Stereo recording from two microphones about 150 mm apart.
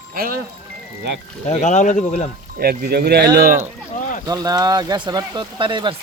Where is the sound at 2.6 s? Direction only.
90° right.